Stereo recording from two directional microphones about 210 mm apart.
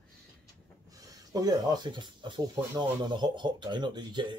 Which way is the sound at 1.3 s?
15° right (ahead or behind).